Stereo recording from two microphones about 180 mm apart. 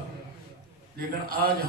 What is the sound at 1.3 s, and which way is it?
Speech, 55° right (ahead or behind).